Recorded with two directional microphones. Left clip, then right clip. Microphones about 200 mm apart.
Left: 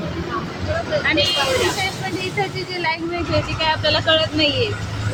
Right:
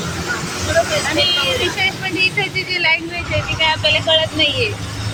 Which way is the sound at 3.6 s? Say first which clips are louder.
Right 5 dB; 35° left (ahead or behind).